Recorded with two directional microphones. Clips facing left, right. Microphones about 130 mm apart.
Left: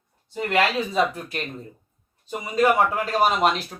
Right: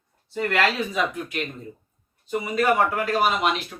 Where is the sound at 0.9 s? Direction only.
30° left (ahead or behind).